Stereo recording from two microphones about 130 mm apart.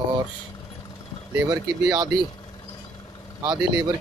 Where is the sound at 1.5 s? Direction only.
30° right (ahead or behind).